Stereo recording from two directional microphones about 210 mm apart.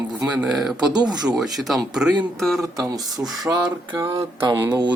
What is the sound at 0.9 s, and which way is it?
Speech, 20° right (ahead or behind).